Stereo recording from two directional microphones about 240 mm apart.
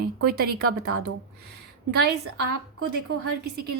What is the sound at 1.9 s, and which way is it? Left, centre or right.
Speech, right.